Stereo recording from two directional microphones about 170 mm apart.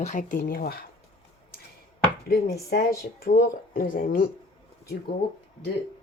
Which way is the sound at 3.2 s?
60° left (ahead or behind).